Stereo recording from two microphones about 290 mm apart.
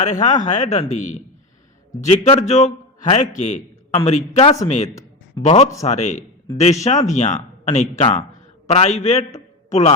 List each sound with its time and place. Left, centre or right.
0.0 s a man's voice: left